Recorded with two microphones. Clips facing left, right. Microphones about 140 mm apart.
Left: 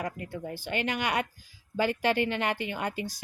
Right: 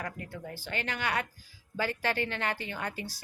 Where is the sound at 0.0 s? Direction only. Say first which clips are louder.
Left 4 dB; 15° left (ahead or behind).